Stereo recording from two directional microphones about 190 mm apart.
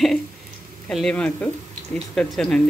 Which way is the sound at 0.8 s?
5° left (ahead or behind).